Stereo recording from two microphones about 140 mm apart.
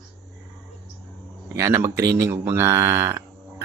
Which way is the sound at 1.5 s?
20° right (ahead or behind).